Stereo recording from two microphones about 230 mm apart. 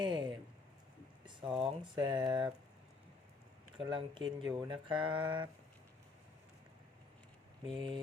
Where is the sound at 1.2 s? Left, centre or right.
Right.